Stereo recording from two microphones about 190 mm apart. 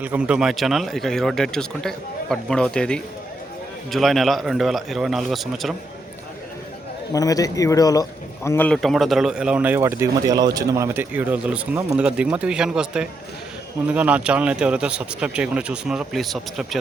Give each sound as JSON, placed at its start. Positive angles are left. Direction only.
{"t": 0.0, "sound": "speech", "side_deg": -5}
{"t": 7.1, "sound": "a man's voice", "side_deg": 20}